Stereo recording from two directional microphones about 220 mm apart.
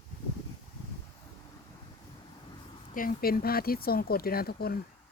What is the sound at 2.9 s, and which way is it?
Speech, 40° left (ahead or behind).